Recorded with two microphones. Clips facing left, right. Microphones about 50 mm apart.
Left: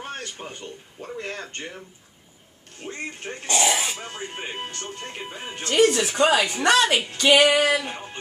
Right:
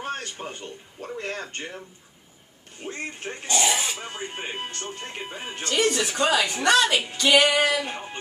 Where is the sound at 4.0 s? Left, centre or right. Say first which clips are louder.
Even; centre.